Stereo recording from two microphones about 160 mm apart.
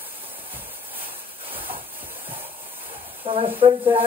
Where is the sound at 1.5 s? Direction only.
35° right (ahead or behind).